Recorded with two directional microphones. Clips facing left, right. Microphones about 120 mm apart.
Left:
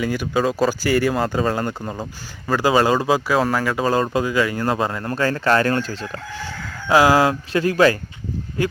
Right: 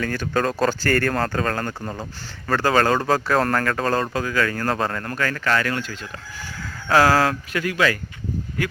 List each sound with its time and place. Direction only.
0.0 s speech: 10° left (ahead or behind)
5.1 s speech: 30° left (ahead or behind)
6.8 s speech: 15° left (ahead or behind)
7.5 s speech: 30° left (ahead or behind)